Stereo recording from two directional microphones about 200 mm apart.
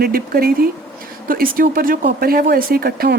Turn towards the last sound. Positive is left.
turn(degrees=-50)  # may be behind; listen again after turning